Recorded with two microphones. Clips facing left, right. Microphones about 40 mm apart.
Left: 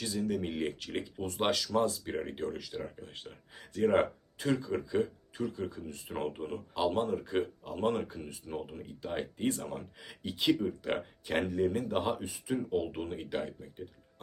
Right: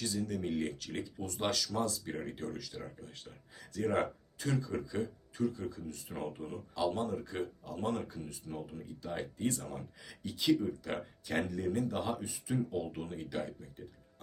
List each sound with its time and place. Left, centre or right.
0.0 s speech: centre
5.0 s speech: centre
5.5 s speech: left